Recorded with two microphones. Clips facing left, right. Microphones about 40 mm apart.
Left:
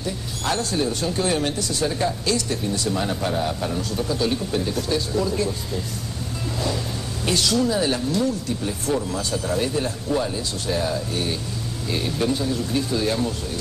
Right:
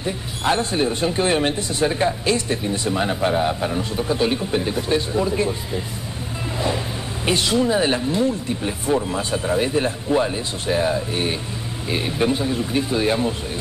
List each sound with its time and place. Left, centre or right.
0.0 s speech: right
7.2 s speech: right